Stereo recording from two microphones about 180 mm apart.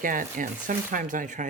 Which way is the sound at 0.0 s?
50° right (ahead or behind).